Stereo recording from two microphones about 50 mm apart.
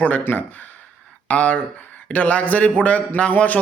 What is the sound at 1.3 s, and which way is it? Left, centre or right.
Speech, left.